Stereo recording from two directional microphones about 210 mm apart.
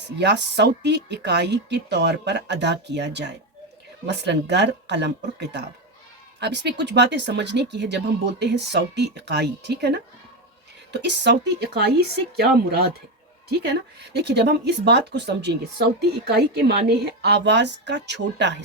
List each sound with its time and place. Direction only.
0.2 s speech: 55° right (ahead or behind)